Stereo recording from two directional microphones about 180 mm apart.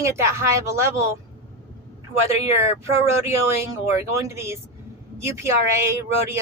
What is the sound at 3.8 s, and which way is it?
Speech, 15° right (ahead or behind).